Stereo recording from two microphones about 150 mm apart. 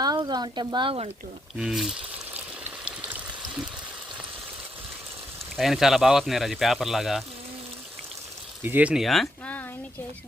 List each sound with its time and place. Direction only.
0.0 s speech: 30° right (ahead or behind)
1.5 s speech: 5° right (ahead or behind)
2.3 s stream: 10° right (ahead or behind)
5.5 s speech: centre (ahead or behind)
8.6 s speech: 10° right (ahead or behind); by 9.6 s 5° left (ahead or behind)